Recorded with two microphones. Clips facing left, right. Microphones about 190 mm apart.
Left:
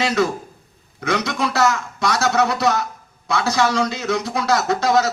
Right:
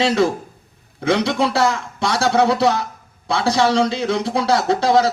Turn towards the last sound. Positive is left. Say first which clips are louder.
# right 2 dB
turn(degrees=-30)  # may be behind; listen again after turning